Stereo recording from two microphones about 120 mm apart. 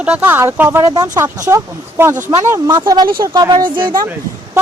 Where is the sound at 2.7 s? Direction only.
40° right (ahead or behind).